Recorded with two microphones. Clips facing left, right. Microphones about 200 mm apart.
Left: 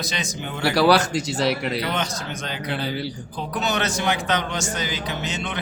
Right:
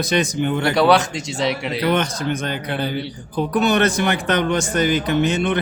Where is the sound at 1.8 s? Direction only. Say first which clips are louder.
Right 7 dB; 55° right (ahead or behind).